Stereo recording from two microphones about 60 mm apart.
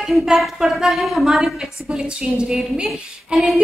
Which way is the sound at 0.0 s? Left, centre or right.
Centre.